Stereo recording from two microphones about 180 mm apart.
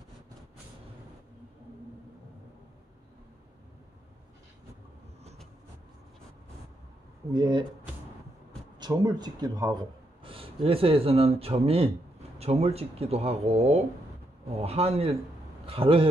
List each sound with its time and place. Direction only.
7.3 s speech: 25° right (ahead or behind)
8.7 s speech: 20° right (ahead or behind)